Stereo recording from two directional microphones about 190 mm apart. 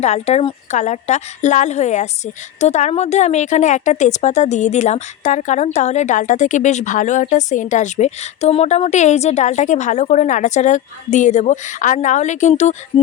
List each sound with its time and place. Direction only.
0.0 s a woman's voice: 35° left (ahead or behind)